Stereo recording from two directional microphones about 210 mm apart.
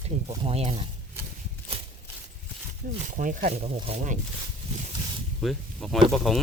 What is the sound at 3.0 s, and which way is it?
Speech, 40° right (ahead or behind).